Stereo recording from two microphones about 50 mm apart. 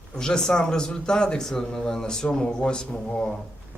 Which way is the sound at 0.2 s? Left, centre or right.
Centre.